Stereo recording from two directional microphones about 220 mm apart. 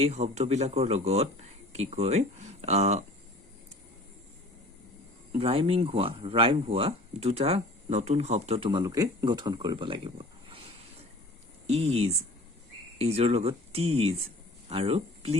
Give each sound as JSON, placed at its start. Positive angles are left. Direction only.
{"t": 0.0, "sound": "speech", "side_deg": -30}
{"t": 5.3, "sound": "speech", "side_deg": -25}